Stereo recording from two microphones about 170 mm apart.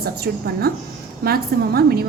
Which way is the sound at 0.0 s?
65° right (ahead or behind).